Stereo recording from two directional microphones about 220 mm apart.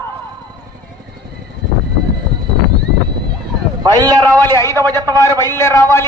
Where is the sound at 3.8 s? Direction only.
15° right (ahead or behind).